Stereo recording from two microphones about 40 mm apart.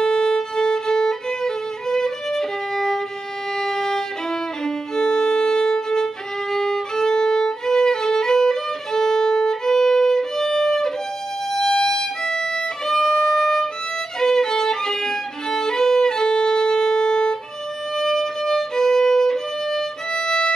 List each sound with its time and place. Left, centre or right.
0.0 s violin: centre